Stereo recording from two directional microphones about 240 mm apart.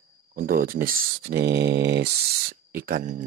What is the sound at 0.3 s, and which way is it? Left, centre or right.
Speech, right.